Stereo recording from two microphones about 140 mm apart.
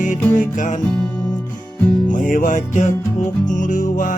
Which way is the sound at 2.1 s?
75° left (ahead or behind).